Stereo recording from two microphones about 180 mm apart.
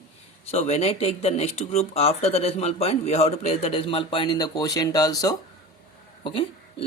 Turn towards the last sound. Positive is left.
turn(degrees=30)  # may be behind; listen again after turning